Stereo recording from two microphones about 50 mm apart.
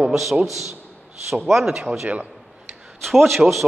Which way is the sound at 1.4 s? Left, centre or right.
Centre.